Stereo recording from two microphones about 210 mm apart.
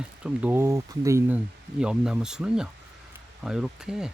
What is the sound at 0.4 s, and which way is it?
Speech, 10° right (ahead or behind).